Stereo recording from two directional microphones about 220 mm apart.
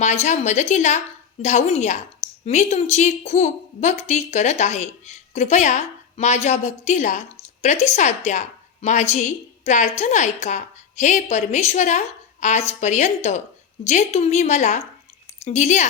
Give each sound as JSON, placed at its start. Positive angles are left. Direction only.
{"t": 0.0, "sound": "a woman's voice", "side_deg": 30}